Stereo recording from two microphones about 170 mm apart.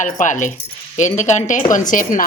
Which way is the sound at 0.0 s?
50° left (ahead or behind).